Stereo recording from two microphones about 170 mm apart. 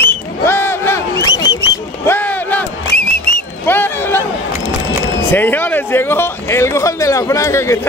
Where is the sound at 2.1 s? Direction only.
10° left (ahead or behind).